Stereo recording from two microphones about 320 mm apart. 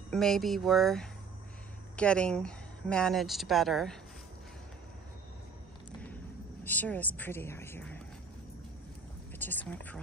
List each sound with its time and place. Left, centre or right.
0.1 s speech: centre
6.6 s speech: centre
9.4 s speech: centre